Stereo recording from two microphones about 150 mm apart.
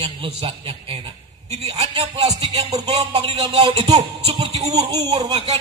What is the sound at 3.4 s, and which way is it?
Speech, 30° right (ahead or behind).